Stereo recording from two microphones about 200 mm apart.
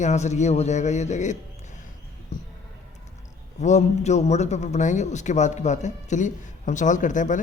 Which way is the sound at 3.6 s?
35° left (ahead or behind).